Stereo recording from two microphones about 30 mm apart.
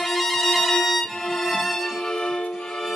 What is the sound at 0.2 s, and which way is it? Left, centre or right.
Music, centre.